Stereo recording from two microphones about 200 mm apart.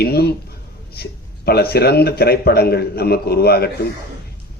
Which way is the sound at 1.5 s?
50° left (ahead or behind).